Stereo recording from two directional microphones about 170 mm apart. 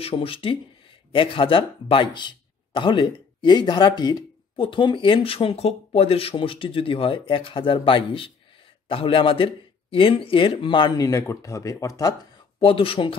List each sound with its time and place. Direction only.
0.0 s speech: 35° left (ahead or behind)
12.5 s speech: 30° left (ahead or behind)